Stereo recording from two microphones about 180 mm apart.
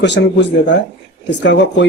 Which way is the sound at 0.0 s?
75° left (ahead or behind).